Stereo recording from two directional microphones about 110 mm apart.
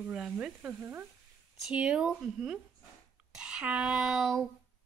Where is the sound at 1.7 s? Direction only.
10° right (ahead or behind).